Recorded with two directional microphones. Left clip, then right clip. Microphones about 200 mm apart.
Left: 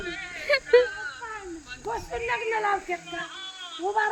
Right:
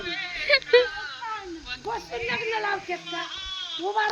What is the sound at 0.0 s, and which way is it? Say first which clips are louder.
Whimper: right 4 dB; 45° right (ahead or behind).